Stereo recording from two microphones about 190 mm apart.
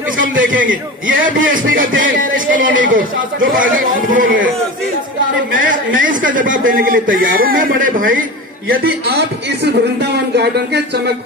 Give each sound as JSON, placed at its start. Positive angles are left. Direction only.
{"t": 0.2, "sound": "a man's voice", "side_deg": -45}
{"t": 5.5, "sound": "a man's voice", "side_deg": -45}
{"t": 9.0, "sound": "speech", "side_deg": -60}